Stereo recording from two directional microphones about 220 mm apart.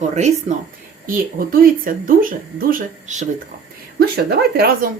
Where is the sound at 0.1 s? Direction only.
30° right (ahead or behind).